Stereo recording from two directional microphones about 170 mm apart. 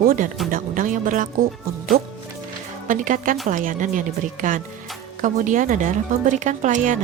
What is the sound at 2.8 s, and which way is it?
Speech, 50° right (ahead or behind).